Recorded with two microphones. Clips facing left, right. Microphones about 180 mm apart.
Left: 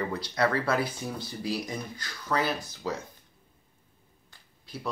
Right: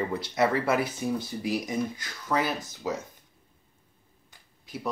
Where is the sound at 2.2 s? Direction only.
15° right (ahead or behind).